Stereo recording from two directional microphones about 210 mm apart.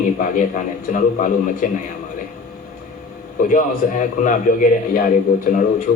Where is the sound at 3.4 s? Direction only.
40° left (ahead or behind).